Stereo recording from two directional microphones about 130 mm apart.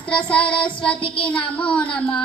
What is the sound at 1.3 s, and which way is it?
Speech, 10° left (ahead or behind).